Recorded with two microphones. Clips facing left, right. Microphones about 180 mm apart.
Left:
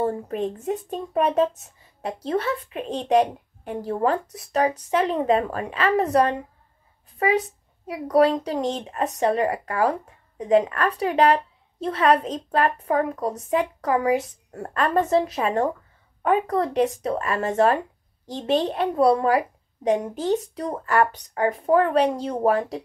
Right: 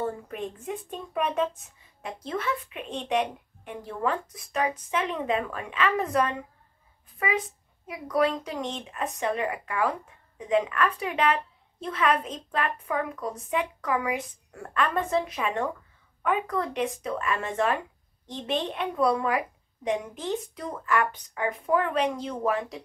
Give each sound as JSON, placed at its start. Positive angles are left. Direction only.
{"t": 0.0, "sound": "a woman's voice", "side_deg": 35}